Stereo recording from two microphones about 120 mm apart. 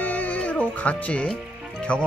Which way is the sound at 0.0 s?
15° left (ahead or behind).